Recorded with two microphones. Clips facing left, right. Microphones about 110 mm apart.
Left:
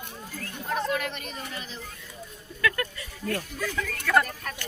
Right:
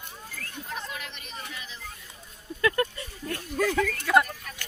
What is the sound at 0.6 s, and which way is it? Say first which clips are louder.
Chatter: left 11 dB; 55° left (ahead or behind).